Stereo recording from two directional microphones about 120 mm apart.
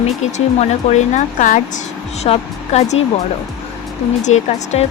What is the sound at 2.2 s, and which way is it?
Speech, 65° left (ahead or behind).